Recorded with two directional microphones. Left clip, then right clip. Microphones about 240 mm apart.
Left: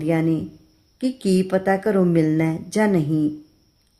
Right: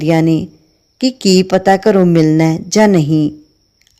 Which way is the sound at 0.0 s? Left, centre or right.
Right.